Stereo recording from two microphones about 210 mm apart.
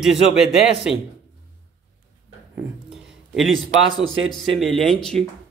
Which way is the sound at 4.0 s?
65° right (ahead or behind).